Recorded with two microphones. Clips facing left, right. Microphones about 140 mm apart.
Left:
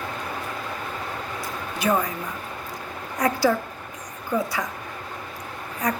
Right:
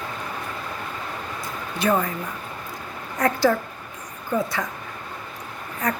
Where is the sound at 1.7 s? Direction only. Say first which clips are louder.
Right 1 dB; 15° left (ahead or behind).